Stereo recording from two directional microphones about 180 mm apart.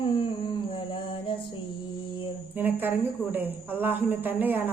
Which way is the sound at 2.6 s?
10° right (ahead or behind).